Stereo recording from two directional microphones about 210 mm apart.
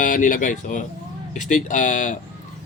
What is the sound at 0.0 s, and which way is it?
A man's voice, 40° left (ahead or behind).